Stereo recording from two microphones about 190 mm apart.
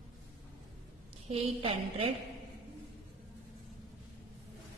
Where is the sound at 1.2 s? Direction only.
30° right (ahead or behind).